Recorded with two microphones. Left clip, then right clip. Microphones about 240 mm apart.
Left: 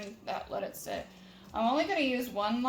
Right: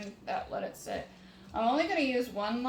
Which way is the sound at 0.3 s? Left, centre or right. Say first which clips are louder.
Right 1 dB; left.